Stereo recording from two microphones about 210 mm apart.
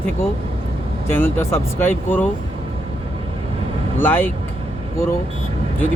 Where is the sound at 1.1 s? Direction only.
10° left (ahead or behind).